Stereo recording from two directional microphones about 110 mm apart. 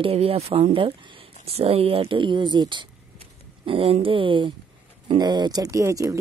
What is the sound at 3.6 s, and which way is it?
Speech, 60° right (ahead or behind).